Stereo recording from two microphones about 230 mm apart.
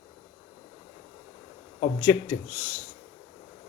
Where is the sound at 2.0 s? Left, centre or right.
Left.